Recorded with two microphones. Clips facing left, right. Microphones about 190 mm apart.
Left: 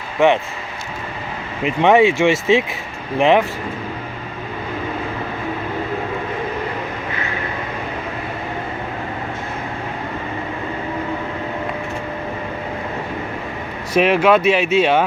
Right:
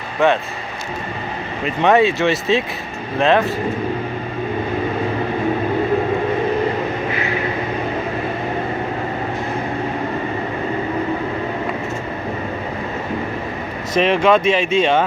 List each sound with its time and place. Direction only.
0.2 s speech: 15° left (ahead or behind)
1.6 s speech: 15° left (ahead or behind)
13.9 s speech: 10° left (ahead or behind)